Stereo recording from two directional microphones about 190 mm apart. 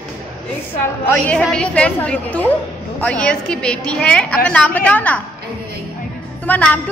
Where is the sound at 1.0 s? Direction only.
10° left (ahead or behind).